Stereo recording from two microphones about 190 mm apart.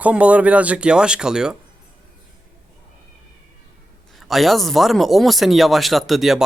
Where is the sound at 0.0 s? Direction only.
5° right (ahead or behind).